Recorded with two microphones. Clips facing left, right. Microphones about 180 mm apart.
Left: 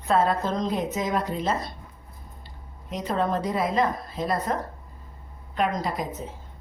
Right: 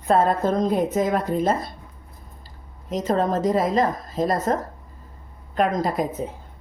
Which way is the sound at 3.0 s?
40° right (ahead or behind).